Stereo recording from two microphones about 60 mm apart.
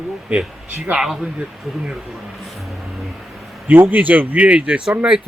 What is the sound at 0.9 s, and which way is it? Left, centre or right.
Speech, centre.